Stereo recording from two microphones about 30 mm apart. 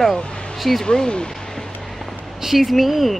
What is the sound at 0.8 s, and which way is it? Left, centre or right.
Speech, left.